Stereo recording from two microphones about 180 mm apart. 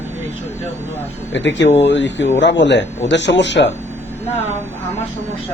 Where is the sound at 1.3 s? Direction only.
80° left.